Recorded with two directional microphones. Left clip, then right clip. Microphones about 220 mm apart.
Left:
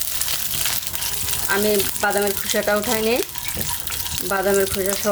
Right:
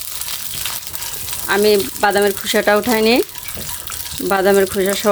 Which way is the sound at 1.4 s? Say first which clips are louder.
Right 6 dB; 50° right (ahead or behind).